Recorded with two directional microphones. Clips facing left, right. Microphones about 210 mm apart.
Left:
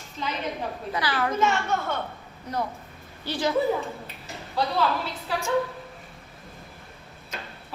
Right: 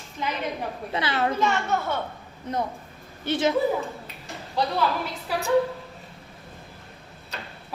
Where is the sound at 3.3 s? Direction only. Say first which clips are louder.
Right 4 dB; 20° right (ahead or behind).